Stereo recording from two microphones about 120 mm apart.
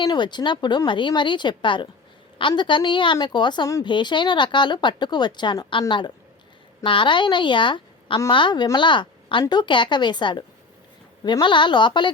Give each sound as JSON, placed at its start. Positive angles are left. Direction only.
{"t": 0.0, "sound": "speech", "side_deg": 40}
{"t": 6.8, "sound": "a woman's voice", "side_deg": 45}